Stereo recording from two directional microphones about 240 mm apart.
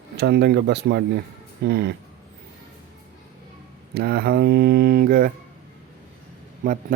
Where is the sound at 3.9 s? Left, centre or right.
Right.